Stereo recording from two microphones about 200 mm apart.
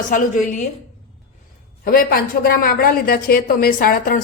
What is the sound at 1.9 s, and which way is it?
A woman's voice, 45° left (ahead or behind).